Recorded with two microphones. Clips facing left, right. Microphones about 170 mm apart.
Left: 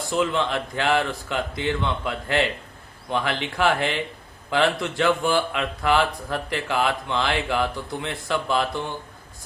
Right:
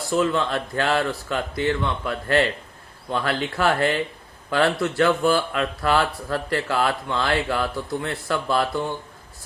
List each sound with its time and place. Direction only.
0.1 s speech: 15° left (ahead or behind)